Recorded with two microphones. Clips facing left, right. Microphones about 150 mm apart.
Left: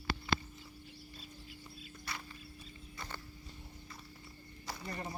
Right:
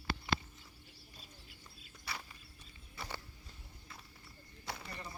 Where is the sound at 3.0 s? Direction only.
10° right (ahead or behind).